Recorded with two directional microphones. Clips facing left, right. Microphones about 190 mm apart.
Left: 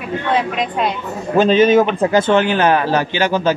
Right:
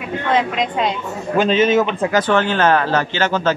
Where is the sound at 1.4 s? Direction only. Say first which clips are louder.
Left 4 dB; 35° left (ahead or behind).